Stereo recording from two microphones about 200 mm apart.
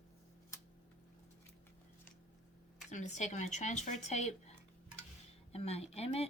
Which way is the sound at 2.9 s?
35° left (ahead or behind).